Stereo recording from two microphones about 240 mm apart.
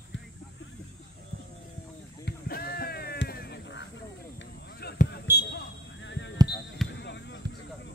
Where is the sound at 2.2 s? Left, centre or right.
Left.